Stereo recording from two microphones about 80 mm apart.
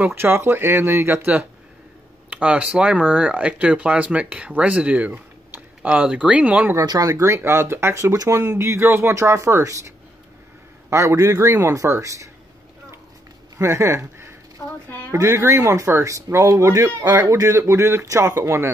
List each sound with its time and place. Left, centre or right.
0.0 s speech: right
2.2 s speech: centre
6.9 s speech: right
10.9 s speech: right
13.6 s speech: right
14.6 s a sound: left
15.0 s speech: right